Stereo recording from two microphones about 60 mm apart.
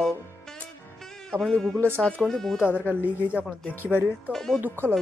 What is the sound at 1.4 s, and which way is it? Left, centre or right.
A man's voice, centre.